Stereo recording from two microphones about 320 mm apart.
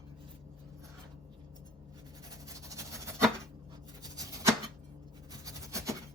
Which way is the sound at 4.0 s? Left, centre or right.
Centre.